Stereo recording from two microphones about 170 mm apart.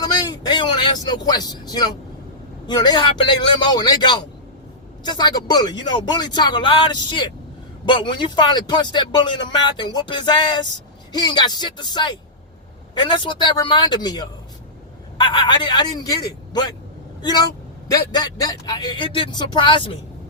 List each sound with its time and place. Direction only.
0.0 s speech: 25° left (ahead or behind)